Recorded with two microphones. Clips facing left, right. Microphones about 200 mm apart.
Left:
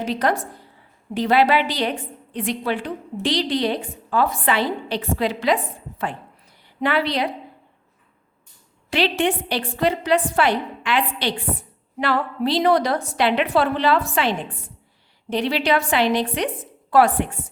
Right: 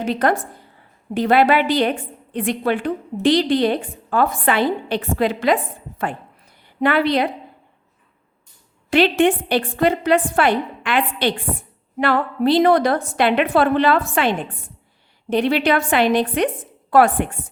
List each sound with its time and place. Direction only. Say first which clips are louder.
0.0 s a woman's voice: right 3 dB; 55° right (ahead or behind)
6.8 s a woman's voice: right 4 dB; 55° right (ahead or behind)
8.9 s a woman's voice: right 5 dB; 50° right (ahead or behind)